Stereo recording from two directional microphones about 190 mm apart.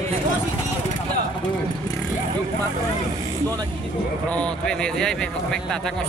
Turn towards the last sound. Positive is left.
turn(degrees=5)  # may be behind; listen again after turning